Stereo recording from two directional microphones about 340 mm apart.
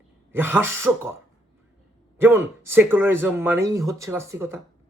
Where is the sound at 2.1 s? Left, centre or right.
Centre.